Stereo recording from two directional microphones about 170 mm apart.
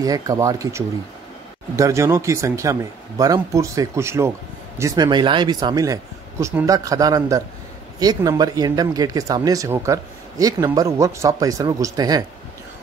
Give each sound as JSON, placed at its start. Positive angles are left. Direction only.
{"t": 0.0, "sound": "speech", "side_deg": -20}